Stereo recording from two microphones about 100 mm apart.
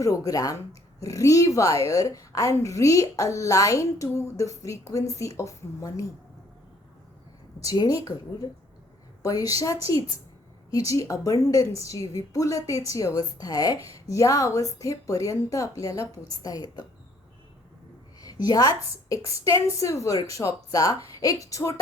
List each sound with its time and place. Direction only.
0.0 s speech: 35° left (ahead or behind)
7.6 s speech: 35° left (ahead or behind)
9.2 s speech: 35° left (ahead or behind)
18.3 s a woman's voice: 40° left (ahead or behind)